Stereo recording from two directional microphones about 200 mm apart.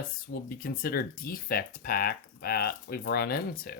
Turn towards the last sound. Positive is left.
turn(degrees=50)  # may be behind; listen again after turning